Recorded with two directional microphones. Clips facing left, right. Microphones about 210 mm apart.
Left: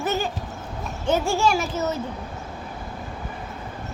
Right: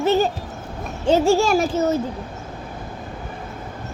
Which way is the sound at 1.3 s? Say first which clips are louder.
Right 5 dB; 35° right (ahead or behind).